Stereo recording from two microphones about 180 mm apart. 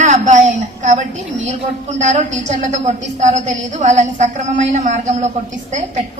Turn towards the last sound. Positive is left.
turn(degrees=-40)  # may be behind; listen again after turning